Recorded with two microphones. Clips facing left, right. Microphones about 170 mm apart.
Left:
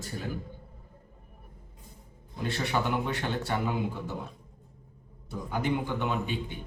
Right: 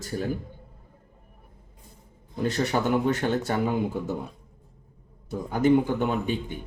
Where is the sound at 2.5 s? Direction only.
45° right (ahead or behind).